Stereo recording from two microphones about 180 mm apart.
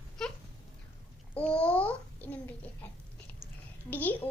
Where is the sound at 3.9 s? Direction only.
10° left (ahead or behind).